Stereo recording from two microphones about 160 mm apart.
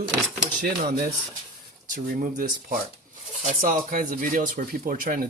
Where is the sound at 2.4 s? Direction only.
60° right (ahead or behind).